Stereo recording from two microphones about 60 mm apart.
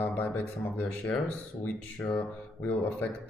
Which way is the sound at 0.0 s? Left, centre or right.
Left.